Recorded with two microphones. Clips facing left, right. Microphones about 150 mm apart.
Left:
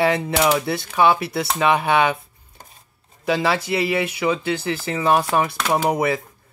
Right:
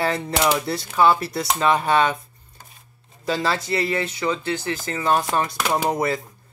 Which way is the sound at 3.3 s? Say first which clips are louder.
Left 3 dB; 5° left (ahead or behind).